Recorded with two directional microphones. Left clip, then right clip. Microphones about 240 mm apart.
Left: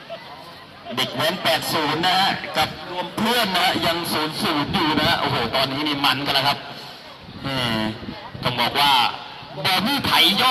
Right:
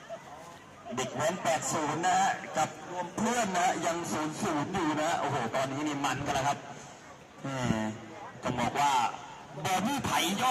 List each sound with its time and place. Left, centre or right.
0.9 s speech: left